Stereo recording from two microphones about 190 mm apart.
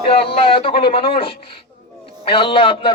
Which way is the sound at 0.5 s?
30° left (ahead or behind).